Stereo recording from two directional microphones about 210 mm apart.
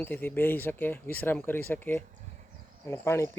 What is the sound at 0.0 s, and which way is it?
Speech, 10° left (ahead or behind).